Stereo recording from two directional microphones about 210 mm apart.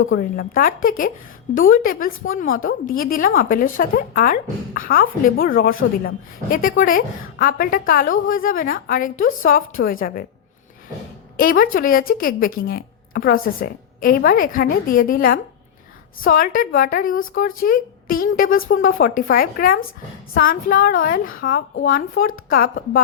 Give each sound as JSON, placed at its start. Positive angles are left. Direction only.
{"t": 0.2, "sound": "a woman's voice", "side_deg": 40}
{"t": 11.3, "sound": "a woman's voice", "side_deg": 40}